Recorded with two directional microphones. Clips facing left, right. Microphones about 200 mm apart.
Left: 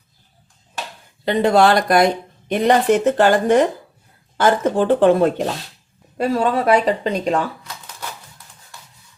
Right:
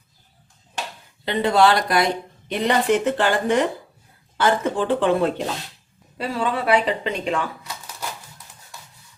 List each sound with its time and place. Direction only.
1.2 s a woman's voice: 45° left (ahead or behind)